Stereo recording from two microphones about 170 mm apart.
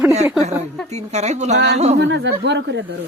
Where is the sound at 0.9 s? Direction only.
40° right (ahead or behind).